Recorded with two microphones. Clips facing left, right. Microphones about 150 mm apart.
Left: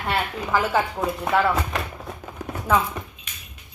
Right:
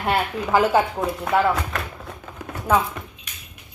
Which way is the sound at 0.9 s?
Centre (ahead or behind).